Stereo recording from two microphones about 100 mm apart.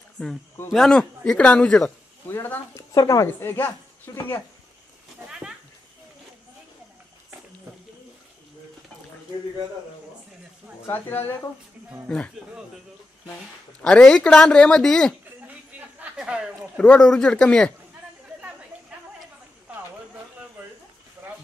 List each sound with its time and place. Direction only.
0.2 s speech: 10° left (ahead or behind)
2.2 s speech: 20° left (ahead or behind)
2.9 s a woman's voice: 35° left (ahead or behind)
3.3 s speech: 20° left (ahead or behind)
5.3 s a sound: 10° right (ahead or behind)
10.9 s speech: 20° left (ahead or behind)
13.8 s speech: 5° left (ahead or behind)
16.0 s speech: 10° right (ahead or behind)
16.7 s speech: 10° left (ahead or behind)